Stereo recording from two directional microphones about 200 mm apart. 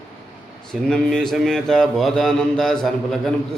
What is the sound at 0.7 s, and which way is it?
Speech, 5° left (ahead or behind).